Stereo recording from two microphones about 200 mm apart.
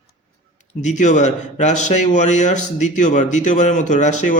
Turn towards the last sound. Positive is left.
turn(degrees=35)  # may be behind; listen again after turning